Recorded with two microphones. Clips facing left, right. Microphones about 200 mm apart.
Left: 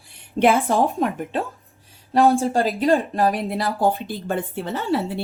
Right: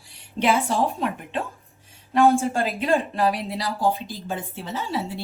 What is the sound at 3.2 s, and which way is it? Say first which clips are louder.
A woman's voice: left 3 dB; 50° left (ahead or behind).